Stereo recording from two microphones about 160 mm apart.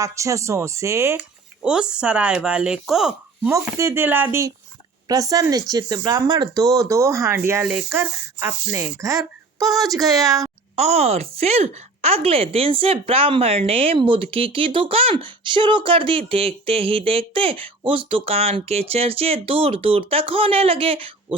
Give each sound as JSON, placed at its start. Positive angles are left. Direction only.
{"t": 0.0, "sound": "speech", "side_deg": -20}
{"t": 1.6, "sound": "speech", "side_deg": -5}
{"t": 3.5, "sound": "speech", "side_deg": -15}
{"t": 10.8, "sound": "speech", "side_deg": -40}